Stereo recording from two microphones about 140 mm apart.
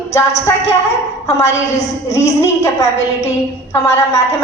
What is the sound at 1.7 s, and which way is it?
Speech, 55° left (ahead or behind).